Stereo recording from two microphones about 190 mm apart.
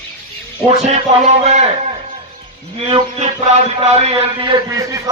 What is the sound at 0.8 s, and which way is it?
Speech, 35° right (ahead or behind).